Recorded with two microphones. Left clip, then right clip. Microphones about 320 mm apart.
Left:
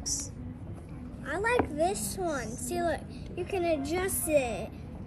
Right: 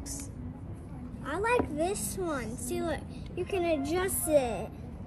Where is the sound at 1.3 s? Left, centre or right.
Centre.